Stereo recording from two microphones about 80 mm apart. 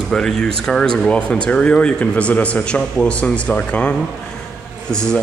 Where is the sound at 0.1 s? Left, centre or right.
Centre.